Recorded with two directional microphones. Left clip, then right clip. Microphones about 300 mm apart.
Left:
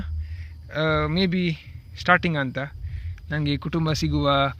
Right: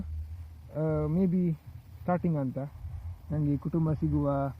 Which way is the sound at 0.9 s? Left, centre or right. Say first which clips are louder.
Left 7 dB; left.